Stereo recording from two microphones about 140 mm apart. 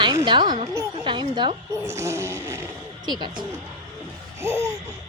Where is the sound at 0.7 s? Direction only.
20° right (ahead or behind).